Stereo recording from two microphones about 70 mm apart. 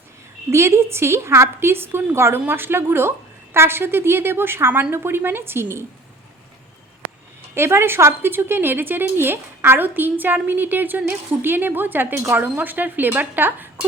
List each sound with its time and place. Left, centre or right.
0.5 s a woman's voice: right
7.5 s a woman's voice: right